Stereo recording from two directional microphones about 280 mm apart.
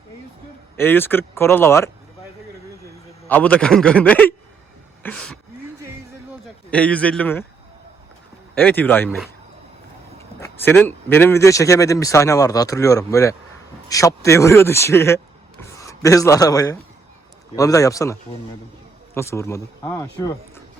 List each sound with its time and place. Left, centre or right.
0.8 s speech: centre
3.2 s a man's voice: centre
6.4 s a man's voice: centre
8.5 s a man's voice: centre